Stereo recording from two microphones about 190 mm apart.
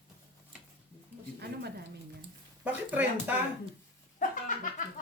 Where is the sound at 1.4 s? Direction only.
60° right (ahead or behind).